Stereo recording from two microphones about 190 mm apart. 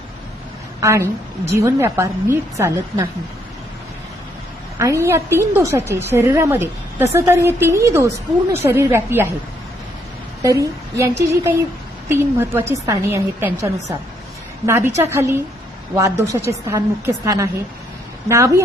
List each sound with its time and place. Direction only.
0.8 s a woman's voice: 15° right (ahead or behind)
4.8 s a woman's voice: 15° right (ahead or behind)
10.4 s a woman's voice: 15° right (ahead or behind)